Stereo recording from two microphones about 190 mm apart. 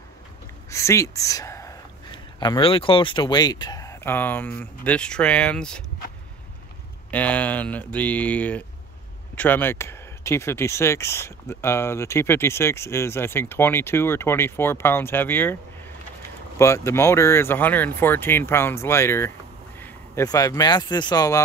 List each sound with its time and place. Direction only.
0.7 s speech: 15° left (ahead or behind)
7.1 s speech: 10° left (ahead or behind)
16.5 s speech: 15° left (ahead or behind)